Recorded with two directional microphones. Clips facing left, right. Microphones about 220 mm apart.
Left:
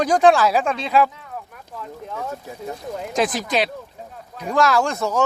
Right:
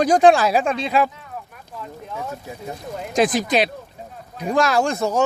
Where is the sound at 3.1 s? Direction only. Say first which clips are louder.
Right 3 dB; 15° right (ahead or behind).